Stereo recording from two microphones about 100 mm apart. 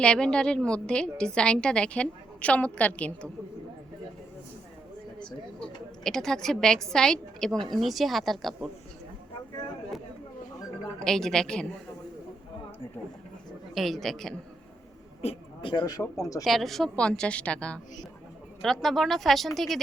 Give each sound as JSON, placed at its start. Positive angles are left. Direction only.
{"t": 0.0, "sound": "a woman's voice", "side_deg": 10}
{"t": 5.2, "sound": "a woman's voice", "side_deg": 5}
{"t": 11.0, "sound": "a woman's voice", "side_deg": 5}
{"t": 13.7, "sound": "a woman's voice", "side_deg": 0}
{"t": 15.2, "sound": "a sound", "side_deg": 80}
{"t": 15.7, "sound": "speech", "side_deg": 45}
{"t": 16.4, "sound": "a woman's voice", "side_deg": 0}